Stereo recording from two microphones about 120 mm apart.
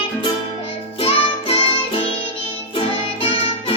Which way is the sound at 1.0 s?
55° left (ahead or behind).